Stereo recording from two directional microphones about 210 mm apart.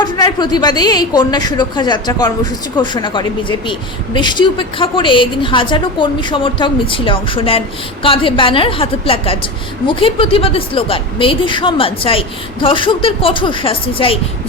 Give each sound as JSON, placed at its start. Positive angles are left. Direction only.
{"t": 0.0, "sound": "a woman's voice", "side_deg": 20}